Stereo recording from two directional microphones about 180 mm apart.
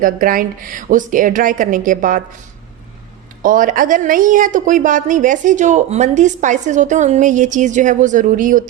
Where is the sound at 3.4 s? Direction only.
45° right (ahead or behind).